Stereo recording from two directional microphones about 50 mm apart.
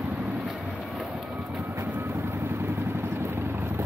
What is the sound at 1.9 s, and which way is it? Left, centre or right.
Vehicle, right.